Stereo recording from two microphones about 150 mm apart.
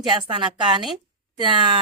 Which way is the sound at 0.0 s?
30° right (ahead or behind).